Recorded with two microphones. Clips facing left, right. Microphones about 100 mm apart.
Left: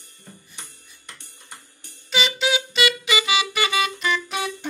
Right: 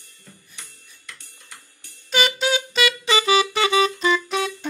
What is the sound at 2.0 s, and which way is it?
Music, 45° right (ahead or behind).